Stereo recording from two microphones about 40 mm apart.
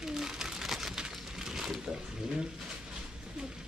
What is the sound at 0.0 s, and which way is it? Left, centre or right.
Crumpling, centre.